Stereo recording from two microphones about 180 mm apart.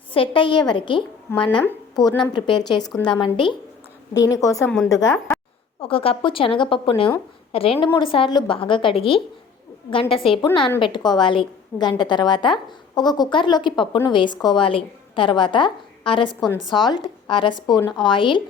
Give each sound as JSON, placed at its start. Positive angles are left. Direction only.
{"t": 0.1, "sound": "a woman's voice", "side_deg": 30}
{"t": 5.8, "sound": "a woman's voice", "side_deg": 30}
{"t": 17.7, "sound": "a woman's voice", "side_deg": 10}
{"t": 18.0, "sound": "a woman's voice", "side_deg": 25}